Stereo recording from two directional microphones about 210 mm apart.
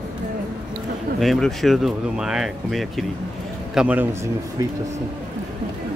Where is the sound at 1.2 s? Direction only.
Centre (ahead or behind).